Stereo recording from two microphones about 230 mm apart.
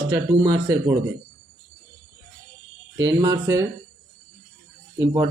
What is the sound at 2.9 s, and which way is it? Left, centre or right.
Speech, centre.